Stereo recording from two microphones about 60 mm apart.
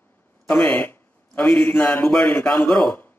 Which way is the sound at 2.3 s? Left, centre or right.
Left.